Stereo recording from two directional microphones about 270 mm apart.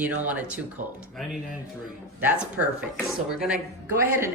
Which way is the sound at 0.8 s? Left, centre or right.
Right.